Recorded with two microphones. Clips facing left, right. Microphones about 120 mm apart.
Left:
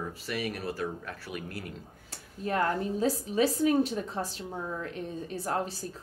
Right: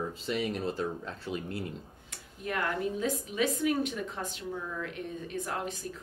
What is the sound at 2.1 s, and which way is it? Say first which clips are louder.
A woman's voice: left 4 dB; 35° left (ahead or behind).